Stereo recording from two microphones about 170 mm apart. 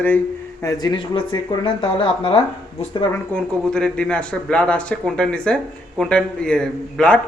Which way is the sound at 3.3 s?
5° left (ahead or behind).